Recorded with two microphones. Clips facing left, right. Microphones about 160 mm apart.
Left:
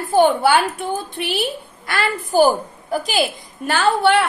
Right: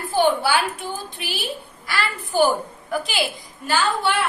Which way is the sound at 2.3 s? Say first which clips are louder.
Left 4 dB; 40° left (ahead or behind).